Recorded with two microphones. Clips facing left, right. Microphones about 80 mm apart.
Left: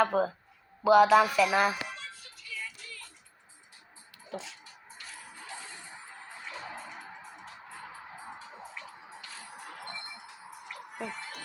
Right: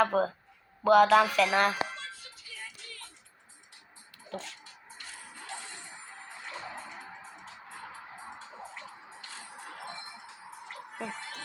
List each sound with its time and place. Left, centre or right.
0.0 s music: centre
1.8 s a sound: right
2.5 s music: right
4.3 s a sound: centre
4.6 s music: left
6.4 s music: right
9.3 s music: right
9.9 s a sound: right
11.0 s fowl: right